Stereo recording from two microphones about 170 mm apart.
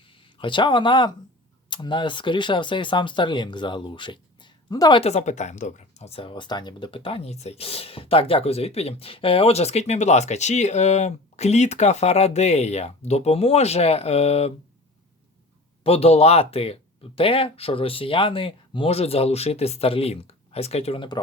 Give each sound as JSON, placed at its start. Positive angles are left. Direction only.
{"t": 0.0, "sound": "speech", "side_deg": 30}
{"t": 15.8, "sound": "speech", "side_deg": 35}